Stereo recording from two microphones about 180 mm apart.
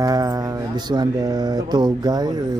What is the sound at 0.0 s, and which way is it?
Speech, 20° right (ahead or behind).